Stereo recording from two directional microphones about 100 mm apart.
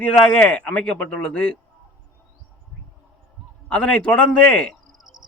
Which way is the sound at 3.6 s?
10° left (ahead or behind).